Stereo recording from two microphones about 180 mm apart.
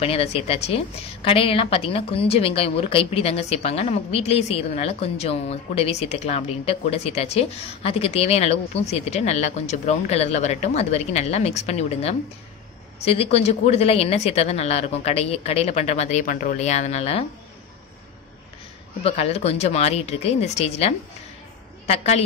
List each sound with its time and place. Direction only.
0.0 s a woman's voice: 35° left (ahead or behind)
19.0 s a woman's voice: 35° left (ahead or behind)